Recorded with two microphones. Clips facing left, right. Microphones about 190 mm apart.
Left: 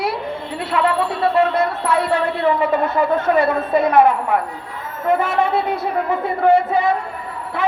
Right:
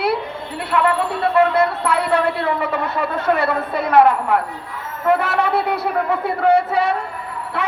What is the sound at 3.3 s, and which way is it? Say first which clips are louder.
A woman's voice: left 4 dB; 70° right (ahead or behind).